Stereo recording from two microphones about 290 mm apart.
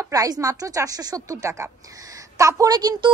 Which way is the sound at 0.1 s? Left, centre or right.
Centre.